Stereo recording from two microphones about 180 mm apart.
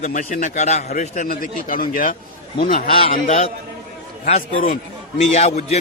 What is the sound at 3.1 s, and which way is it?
A man's voice, 40° left (ahead or behind).